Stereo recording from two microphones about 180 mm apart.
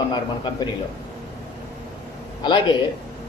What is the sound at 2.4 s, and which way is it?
Speech, 25° left (ahead or behind).